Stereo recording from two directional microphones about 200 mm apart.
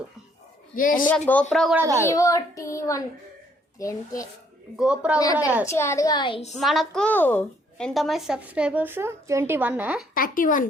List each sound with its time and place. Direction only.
0.8 s speech: 45° left (ahead or behind)
1.0 s a child's voice: 10° left (ahead or behind)
1.7 s a child's voice: 15° right (ahead or behind)
2.0 s a child's voice: 15° left (ahead or behind)
4.8 s a woman's voice: 5° right (ahead or behind)
5.2 s a child's voice: 20° left (ahead or behind)
6.6 s a woman's voice: centre (ahead or behind)
10.2 s speech: 45° left (ahead or behind)